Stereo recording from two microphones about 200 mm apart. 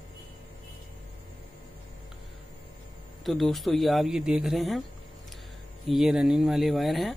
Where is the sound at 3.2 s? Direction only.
Centre (ahead or behind).